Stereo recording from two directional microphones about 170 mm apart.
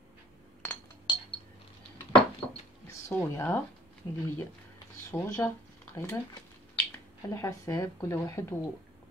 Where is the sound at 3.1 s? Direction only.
15° left (ahead or behind).